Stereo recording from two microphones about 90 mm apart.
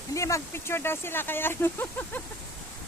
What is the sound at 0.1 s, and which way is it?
Speech, 35° left (ahead or behind).